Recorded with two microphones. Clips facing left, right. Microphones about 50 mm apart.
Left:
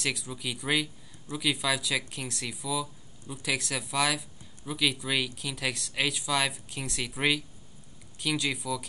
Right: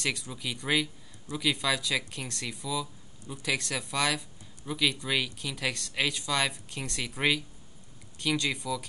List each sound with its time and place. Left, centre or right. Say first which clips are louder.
0.0 s speech: even; centre